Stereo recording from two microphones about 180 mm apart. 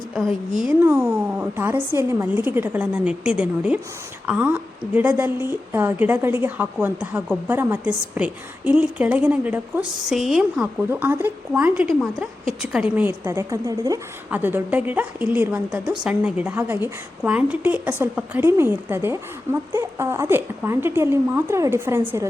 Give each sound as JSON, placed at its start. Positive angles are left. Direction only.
{"t": 0.8, "sound": "a woman's voice", "side_deg": -10}